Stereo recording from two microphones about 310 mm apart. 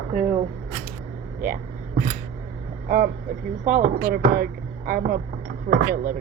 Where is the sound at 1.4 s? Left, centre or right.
Right.